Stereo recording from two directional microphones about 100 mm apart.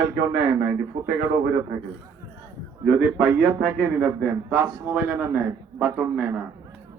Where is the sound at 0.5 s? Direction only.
20° right (ahead or behind).